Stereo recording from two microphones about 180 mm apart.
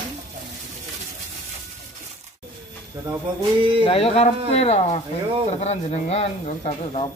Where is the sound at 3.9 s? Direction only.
30° left (ahead or behind).